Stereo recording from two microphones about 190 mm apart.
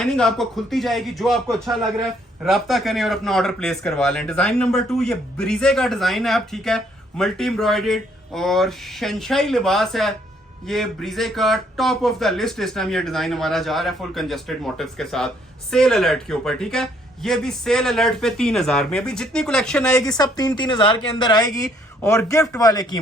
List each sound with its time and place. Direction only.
0.0 s speech: 5° left (ahead or behind)
20.1 s speech: 20° left (ahead or behind)